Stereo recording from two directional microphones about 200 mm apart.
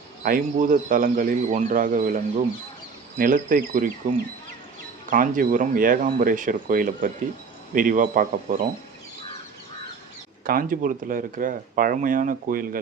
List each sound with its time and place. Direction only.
0.2 s speech: 45° right (ahead or behind)
5.1 s speech: 40° right (ahead or behind)
10.4 s speech: 45° right (ahead or behind)